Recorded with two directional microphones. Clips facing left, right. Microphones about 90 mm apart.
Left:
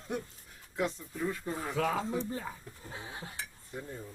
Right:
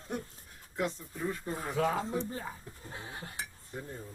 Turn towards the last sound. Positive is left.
turn(degrees=-15)  # may be behind; listen again after turning